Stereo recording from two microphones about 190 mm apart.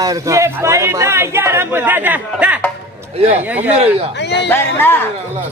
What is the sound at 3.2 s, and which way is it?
Speech, 35° right (ahead or behind).